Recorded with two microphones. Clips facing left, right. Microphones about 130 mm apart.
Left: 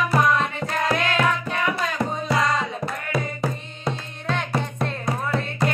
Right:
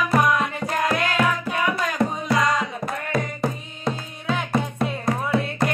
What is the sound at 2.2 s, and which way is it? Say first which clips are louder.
Music: even; 30° left (ahead or behind).